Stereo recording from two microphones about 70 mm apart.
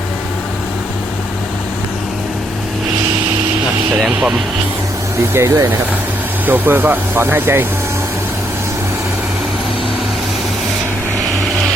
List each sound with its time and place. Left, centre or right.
4.0 s speech: centre
5.3 s speech: right
6.4 s speech: right